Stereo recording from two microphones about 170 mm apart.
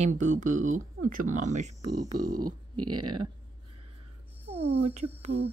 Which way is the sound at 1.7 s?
20° right (ahead or behind).